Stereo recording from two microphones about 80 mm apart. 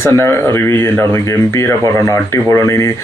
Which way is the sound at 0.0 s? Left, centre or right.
Left.